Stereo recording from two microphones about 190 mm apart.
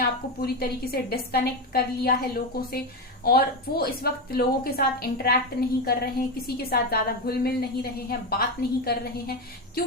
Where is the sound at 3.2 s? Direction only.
55° left (ahead or behind).